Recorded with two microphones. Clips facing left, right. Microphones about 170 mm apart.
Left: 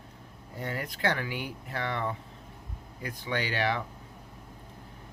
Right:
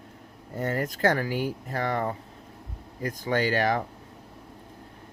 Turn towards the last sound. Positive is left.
turn(degrees=-45)  # may be behind; listen again after turning